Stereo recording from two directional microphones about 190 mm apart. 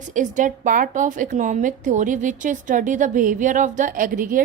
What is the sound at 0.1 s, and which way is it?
A woman's voice, 40° right (ahead or behind).